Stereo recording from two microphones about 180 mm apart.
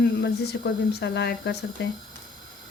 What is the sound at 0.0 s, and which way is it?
Speech, 65° left (ahead or behind).